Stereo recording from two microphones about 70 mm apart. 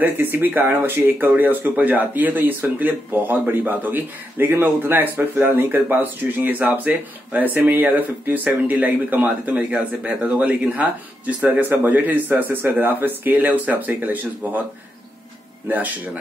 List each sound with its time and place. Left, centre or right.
0.0 s speech: right